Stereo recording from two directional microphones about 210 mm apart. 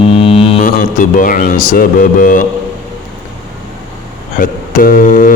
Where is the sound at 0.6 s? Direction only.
40° left (ahead or behind).